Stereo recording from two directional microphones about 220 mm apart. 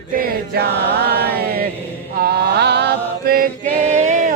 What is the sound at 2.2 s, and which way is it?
Mantra, 45° right (ahead or behind).